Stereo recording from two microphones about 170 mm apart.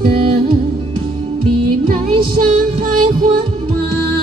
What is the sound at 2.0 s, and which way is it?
Music, 30° right (ahead or behind).